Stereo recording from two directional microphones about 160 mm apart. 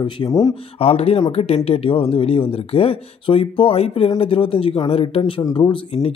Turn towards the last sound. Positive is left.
turn(degrees=35)  # may be behind; listen again after turning